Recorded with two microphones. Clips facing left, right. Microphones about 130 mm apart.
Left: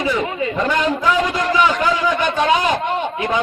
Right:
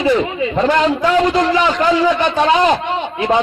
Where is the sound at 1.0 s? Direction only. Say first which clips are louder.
Right 4 dB; 50° right (ahead or behind).